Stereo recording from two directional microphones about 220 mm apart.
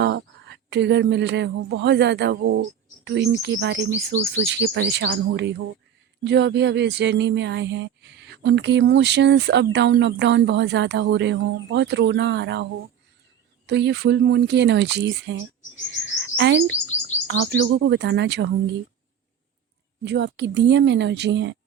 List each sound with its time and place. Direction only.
0.0 s speech: 55° right (ahead or behind)
13.7 s speech: 50° right (ahead or behind)
16.4 s speech: 55° right (ahead or behind)
20.1 s speech: 50° right (ahead or behind)